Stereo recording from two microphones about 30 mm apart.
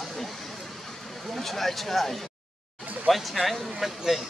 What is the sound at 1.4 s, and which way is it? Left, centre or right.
Speech, centre.